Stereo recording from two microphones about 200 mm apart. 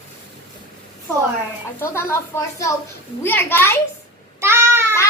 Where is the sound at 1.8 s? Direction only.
10° left (ahead or behind).